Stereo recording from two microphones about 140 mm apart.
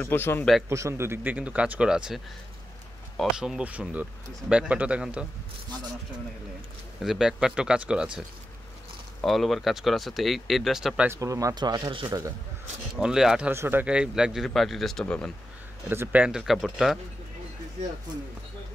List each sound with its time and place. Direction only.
0.0 s a man's voice: 15° left (ahead or behind)
0.7 s speech: 20° right (ahead or behind)
7.0 s speech: 5° right (ahead or behind)
9.2 s speech: centre (ahead or behind)
11.1 s speech: 25° right (ahead or behind)
12.9 s speech: 5° right (ahead or behind)
13.5 s speech: 15° right (ahead or behind); by 15.3 s 5° left (ahead or behind)
15.9 s speech: 15° right (ahead or behind)